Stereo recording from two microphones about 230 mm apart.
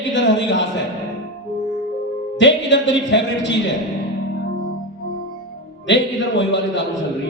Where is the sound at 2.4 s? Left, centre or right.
Left.